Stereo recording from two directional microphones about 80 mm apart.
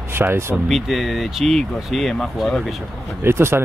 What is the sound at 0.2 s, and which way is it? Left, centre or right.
Speech, right.